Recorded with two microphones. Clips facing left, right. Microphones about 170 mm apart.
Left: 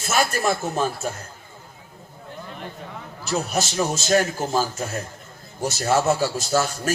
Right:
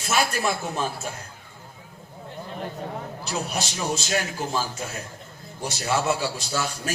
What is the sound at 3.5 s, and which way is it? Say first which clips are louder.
A man's voice: left 4 dB; 45° left (ahead or behind).